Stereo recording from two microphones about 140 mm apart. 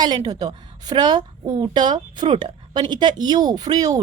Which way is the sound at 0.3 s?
30° right (ahead or behind).